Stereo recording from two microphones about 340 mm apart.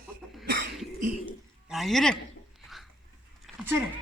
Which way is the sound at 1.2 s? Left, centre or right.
Centre.